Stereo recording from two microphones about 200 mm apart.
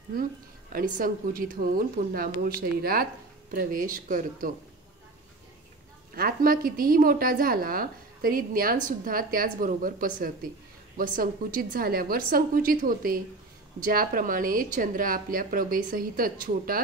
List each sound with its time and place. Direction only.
0.7 s a woman's voice: 45° right (ahead or behind)
6.1 s a woman's voice: 45° right (ahead or behind)